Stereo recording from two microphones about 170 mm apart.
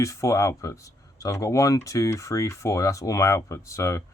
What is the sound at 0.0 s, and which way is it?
Speech, 15° left (ahead or behind).